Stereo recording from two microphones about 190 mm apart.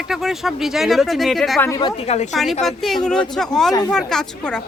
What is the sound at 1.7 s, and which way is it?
Speech, 25° left (ahead or behind).